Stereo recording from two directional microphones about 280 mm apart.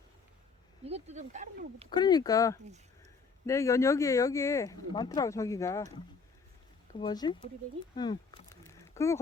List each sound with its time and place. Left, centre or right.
0.9 s speech: right
1.9 s speech: centre
7.0 s speech: centre
8.1 s a sound: centre